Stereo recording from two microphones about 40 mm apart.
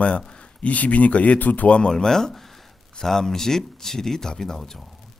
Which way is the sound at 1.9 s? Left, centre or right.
Centre.